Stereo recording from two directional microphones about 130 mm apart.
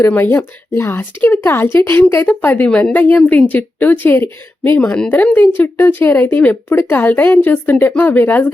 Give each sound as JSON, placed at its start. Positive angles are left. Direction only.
{"t": 0.0, "sound": "a woman's voice", "side_deg": 15}